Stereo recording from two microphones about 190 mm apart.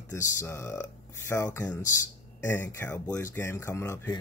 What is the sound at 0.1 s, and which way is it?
Speech, 15° left (ahead or behind).